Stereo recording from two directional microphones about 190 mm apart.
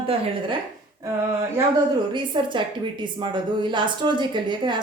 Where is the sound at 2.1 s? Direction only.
25° right (ahead or behind).